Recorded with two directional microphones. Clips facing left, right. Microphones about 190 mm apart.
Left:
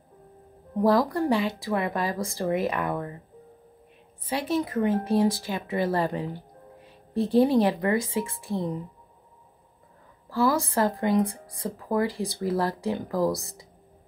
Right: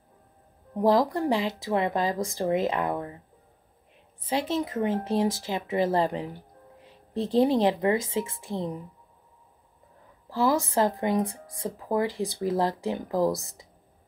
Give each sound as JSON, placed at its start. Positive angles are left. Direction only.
{"t": 0.8, "sound": "speech", "side_deg": -20}
{"t": 4.3, "sound": "speech", "side_deg": -25}
{"t": 10.3, "sound": "speech", "side_deg": -20}